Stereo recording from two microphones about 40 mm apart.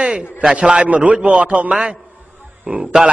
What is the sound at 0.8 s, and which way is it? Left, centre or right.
Speech, right.